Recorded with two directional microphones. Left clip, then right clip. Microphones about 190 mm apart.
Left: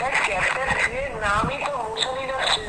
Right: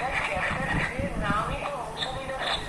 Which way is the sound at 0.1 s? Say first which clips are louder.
Left 6 dB; 60° left (ahead or behind).